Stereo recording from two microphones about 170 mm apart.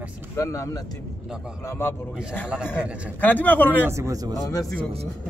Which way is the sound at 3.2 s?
10° left (ahead or behind).